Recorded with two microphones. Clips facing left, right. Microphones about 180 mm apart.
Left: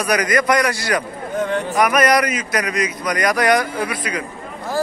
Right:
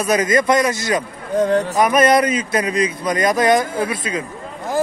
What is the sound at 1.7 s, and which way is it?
A man's voice, 25° right (ahead or behind).